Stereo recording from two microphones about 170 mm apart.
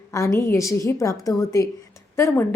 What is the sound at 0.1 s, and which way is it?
A woman's voice, 15° left (ahead or behind).